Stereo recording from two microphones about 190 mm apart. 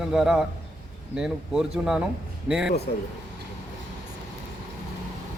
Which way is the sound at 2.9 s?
50° left (ahead or behind).